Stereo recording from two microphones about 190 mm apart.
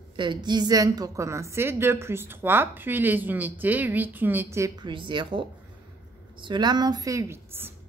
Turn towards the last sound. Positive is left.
turn(degrees=-15)  # may be behind; listen again after turning